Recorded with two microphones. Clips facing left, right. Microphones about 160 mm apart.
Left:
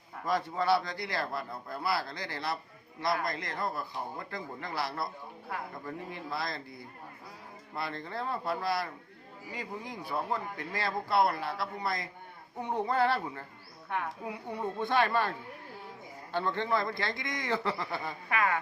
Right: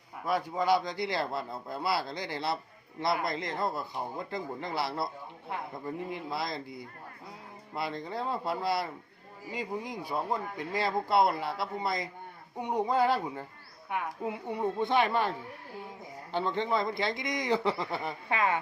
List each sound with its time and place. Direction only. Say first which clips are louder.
0.3 s speech: right 1 dB; 10° right (ahead or behind)